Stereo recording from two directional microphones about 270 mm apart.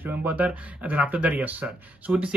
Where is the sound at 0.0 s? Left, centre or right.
Centre.